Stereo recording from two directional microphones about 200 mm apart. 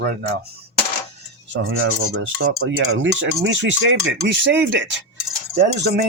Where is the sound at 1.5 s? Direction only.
85° right.